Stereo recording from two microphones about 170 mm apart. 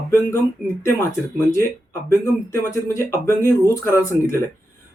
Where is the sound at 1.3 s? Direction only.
15° left (ahead or behind).